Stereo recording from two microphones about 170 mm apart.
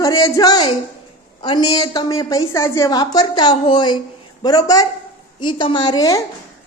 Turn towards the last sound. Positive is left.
turn(degrees=20)  # may be behind; listen again after turning